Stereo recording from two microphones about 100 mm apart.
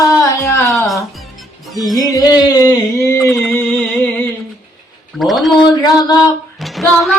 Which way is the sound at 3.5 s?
15° left (ahead or behind).